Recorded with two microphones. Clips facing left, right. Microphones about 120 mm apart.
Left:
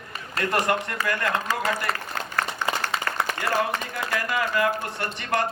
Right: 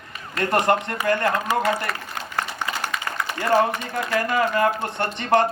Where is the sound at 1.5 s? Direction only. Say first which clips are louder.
Right 5 dB; 15° right (ahead or behind).